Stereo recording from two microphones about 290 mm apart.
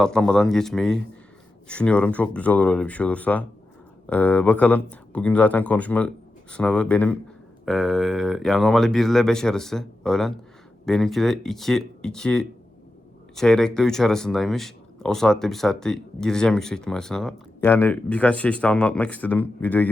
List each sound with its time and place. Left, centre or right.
0.0 s speech: centre